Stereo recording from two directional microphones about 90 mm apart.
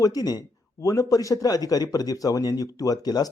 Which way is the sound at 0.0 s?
45° left (ahead or behind).